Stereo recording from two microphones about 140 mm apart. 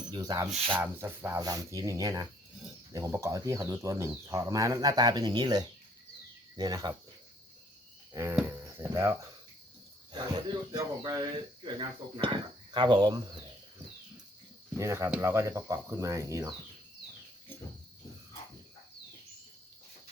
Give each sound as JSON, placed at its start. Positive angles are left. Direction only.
{"t": 0.1, "sound": "speech", "side_deg": -25}
{"t": 0.7, "sound": "speech", "side_deg": -15}
{"t": 8.1, "sound": "moo", "side_deg": -20}
{"t": 8.4, "sound": "cricket", "side_deg": -20}
{"t": 10.1, "sound": "speech", "side_deg": -30}
{"t": 14.8, "sound": "speech", "side_deg": -20}